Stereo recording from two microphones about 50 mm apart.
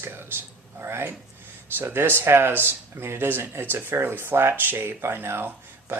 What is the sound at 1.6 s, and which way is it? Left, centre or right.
Speech, right.